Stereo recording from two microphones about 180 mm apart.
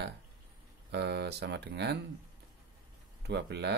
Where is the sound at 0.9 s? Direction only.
65° right (ahead or behind).